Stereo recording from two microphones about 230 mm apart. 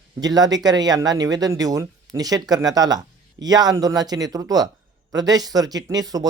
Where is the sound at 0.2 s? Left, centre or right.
Centre.